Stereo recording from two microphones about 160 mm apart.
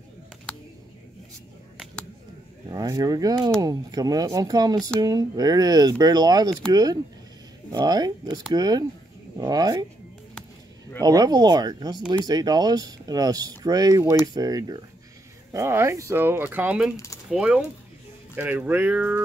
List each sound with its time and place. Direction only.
2.7 s speech: 25° right (ahead or behind)
11.0 s speech: 25° right (ahead or behind); by 16.9 s 10° right (ahead or behind)
16.9 s speech: 20° left (ahead or behind)
17.3 s mechanisms: 5° right (ahead or behind)
18.3 s speech: 10° right (ahead or behind)